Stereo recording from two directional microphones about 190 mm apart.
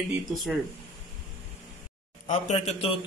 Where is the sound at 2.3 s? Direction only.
40° left (ahead or behind).